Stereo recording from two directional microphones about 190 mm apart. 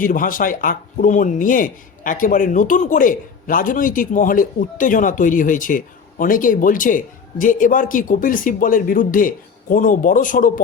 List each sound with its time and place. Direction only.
0.0 s speech: 45° left (ahead or behind)